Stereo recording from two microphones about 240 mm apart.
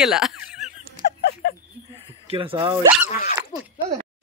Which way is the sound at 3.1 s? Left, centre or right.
Left.